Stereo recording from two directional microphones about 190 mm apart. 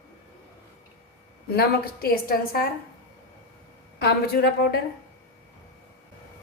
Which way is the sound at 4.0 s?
60° left (ahead or behind).